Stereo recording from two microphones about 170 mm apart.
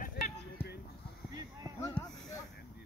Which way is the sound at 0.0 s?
65° left (ahead or behind).